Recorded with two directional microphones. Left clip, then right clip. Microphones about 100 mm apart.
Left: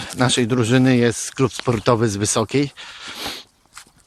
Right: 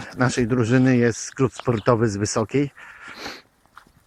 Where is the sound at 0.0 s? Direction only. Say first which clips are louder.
Left 3 dB; 35° left (ahead or behind).